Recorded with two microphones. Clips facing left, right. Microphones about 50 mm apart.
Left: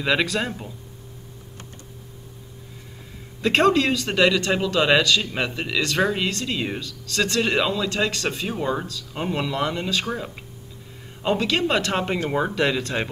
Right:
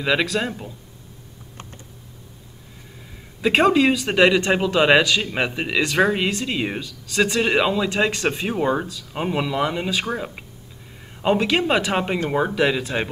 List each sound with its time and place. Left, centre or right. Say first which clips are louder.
0.0 s speech: right 1 dB; centre
3.3 s speech: right 2 dB; centre